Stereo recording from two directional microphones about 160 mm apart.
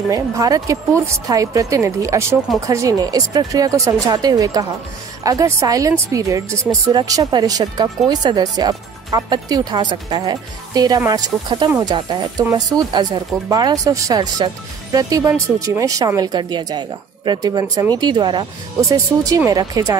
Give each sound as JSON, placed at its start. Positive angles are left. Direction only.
{"t": 0.1, "sound": "speech", "side_deg": -20}